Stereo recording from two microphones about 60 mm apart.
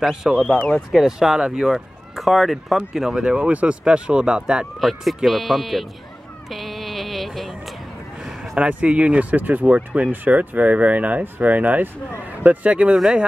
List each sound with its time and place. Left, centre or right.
0.0 s speech: centre
4.7 s speech: centre
6.5 s music: centre
8.5 s speech: right
12.9 s speech: centre